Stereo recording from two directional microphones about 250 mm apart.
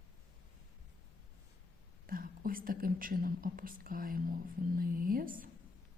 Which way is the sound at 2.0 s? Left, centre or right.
Right.